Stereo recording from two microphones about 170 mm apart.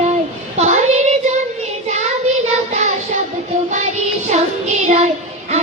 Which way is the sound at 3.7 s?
45° right (ahead or behind).